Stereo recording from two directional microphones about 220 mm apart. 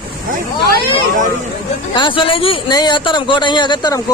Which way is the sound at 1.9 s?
20° left (ahead or behind).